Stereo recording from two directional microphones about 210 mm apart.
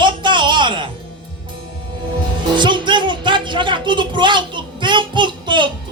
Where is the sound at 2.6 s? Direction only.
20° right (ahead or behind).